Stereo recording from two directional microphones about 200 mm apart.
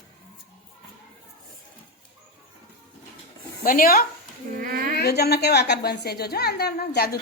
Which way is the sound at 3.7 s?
45° left (ahead or behind).